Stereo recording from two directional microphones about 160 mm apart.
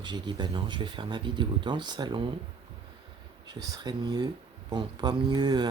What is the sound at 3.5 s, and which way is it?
Speech, 25° right (ahead or behind).